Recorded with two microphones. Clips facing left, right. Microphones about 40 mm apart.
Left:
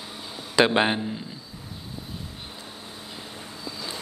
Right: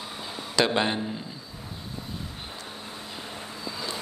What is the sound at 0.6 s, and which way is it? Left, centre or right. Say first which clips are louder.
Speech: left 4 dB; centre.